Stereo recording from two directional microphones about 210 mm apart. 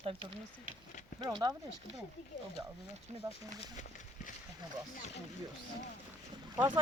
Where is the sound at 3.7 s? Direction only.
35° left (ahead or behind).